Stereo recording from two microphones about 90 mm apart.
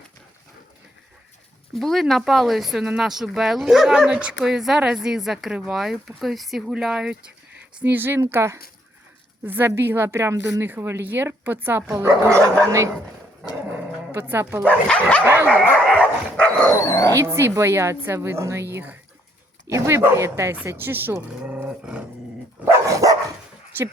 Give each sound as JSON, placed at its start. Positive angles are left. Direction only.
{"t": 1.7, "sound": "speech", "side_deg": 0}
{"t": 7.8, "sound": "a woman's voice", "side_deg": -20}
{"t": 11.9, "sound": "speech", "side_deg": -35}
{"t": 14.1, "sound": "a woman's voice", "side_deg": -25}
{"t": 14.8, "sound": "dog", "side_deg": 15}
{"t": 15.2, "sound": "a woman's voice", "side_deg": -25}
{"t": 15.9, "sound": "dog", "side_deg": 10}
{"t": 16.8, "sound": "speech", "side_deg": 35}
{"t": 17.2, "sound": "a woman's voice", "side_deg": -30}
{"t": 22.9, "sound": "dog", "side_deg": -40}
{"t": 23.7, "sound": "speech", "side_deg": -25}